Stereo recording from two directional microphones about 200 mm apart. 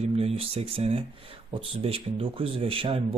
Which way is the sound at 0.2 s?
30° right (ahead or behind).